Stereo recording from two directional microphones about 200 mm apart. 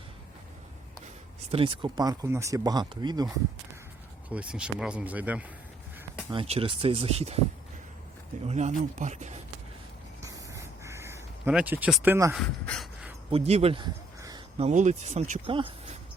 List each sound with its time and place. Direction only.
1.5 s speech: 25° right (ahead or behind)
4.3 s speech: 5° right (ahead or behind)
6.3 s speech: 30° right (ahead or behind)
8.4 s speech: 35° right (ahead or behind)
10.2 s a sound: 15° right (ahead or behind)
12.3 s speech: 5° left (ahead or behind)
13.3 s speech: 30° right (ahead or behind)
14.6 s speech: 35° right (ahead or behind)